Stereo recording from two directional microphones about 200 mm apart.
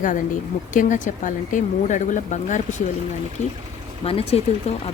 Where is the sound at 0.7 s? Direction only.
40° left (ahead or behind).